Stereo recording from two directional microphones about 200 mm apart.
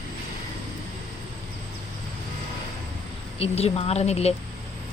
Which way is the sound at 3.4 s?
30° left (ahead or behind).